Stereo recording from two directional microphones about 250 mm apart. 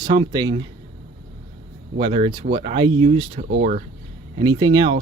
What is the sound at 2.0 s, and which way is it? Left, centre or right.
Speech, right.